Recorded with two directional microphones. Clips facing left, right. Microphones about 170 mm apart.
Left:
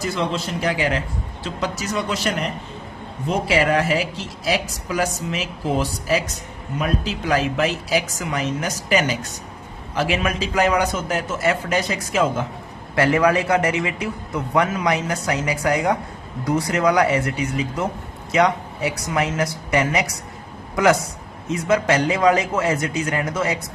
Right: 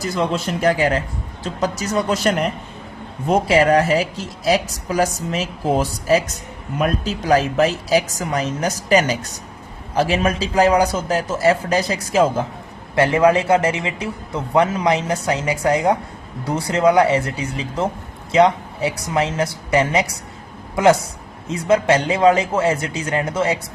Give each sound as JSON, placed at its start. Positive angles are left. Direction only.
{"t": 0.0, "sound": "a man's voice", "side_deg": -45}
{"t": 21.5, "sound": "a man's voice", "side_deg": -30}